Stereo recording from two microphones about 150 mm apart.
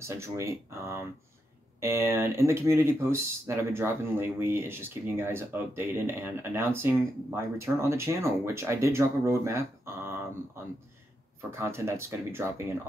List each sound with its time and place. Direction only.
0.0 s speech: 20° right (ahead or behind)